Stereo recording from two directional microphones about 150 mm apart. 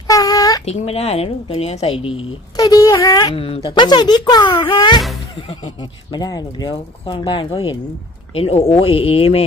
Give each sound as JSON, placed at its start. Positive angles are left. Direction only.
{"t": 0.1, "sound": "a sound", "side_deg": 25}
{"t": 0.6, "sound": "speech", "side_deg": 45}
{"t": 2.6, "sound": "speech", "side_deg": 25}
{"t": 3.3, "sound": "speech", "side_deg": 40}